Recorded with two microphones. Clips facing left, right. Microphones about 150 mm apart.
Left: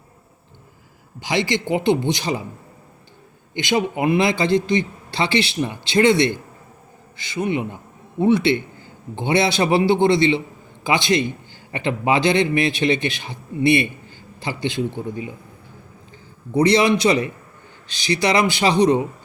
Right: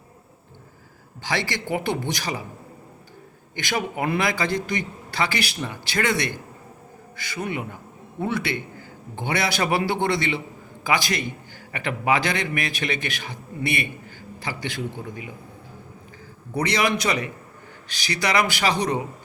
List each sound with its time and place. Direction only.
1.2 s a man's voice: 15° left (ahead or behind)
3.5 s a man's voice: 20° left (ahead or behind)
16.5 s a man's voice: 25° left (ahead or behind)